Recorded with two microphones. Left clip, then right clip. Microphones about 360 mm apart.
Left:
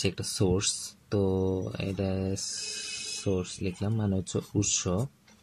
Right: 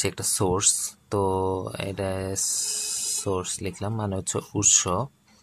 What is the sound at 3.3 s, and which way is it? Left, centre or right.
Speech, right.